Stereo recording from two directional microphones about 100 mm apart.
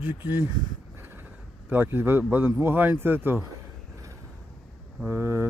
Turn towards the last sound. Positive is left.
turn(degrees=-25)  # may be behind; listen again after turning